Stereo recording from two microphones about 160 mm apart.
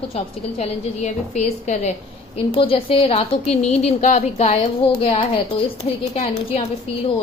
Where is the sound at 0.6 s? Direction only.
45° left (ahead or behind).